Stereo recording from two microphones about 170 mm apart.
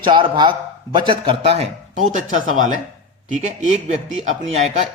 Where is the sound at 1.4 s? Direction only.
40° right (ahead or behind).